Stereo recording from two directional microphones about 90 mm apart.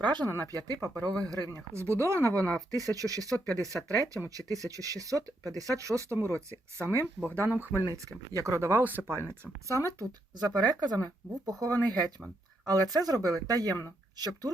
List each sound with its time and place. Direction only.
0.0 s speech: 55° right (ahead or behind)
0.4 s speech: 45° right (ahead or behind)
1.7 s speech: 30° right (ahead or behind)
8.3 s speech: 40° right (ahead or behind)
10.3 s speech: 50° right (ahead or behind)